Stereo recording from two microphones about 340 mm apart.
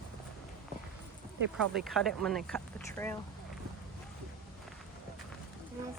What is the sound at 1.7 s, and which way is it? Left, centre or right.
Speech, centre.